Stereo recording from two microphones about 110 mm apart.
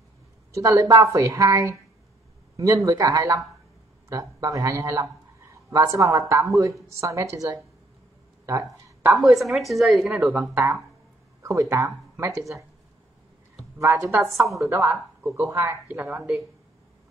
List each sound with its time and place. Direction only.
0.6 s a woman's voice: 30° right (ahead or behind)
9.2 s a woman's voice: centre (ahead or behind)
10.2 s a woman's voice: 20° right (ahead or behind)
11.7 s a woman's voice: 25° right (ahead or behind)
13.7 s a woman's voice: 25° right (ahead or behind)
14.3 s a woman's voice: centre (ahead or behind)
14.6 s a woman's voice: 25° right (ahead or behind)